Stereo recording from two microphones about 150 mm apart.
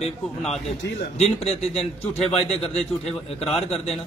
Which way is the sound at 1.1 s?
45° left (ahead or behind).